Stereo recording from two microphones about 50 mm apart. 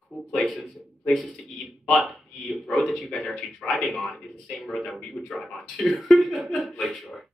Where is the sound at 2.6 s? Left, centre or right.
Centre.